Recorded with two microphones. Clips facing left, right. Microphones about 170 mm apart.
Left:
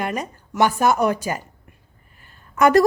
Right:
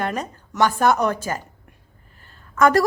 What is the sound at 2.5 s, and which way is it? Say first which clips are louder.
Speech: left 2 dB; 20° left (ahead or behind).